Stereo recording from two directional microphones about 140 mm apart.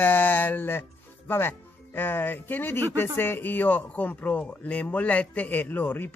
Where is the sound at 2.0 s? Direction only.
15° left (ahead or behind).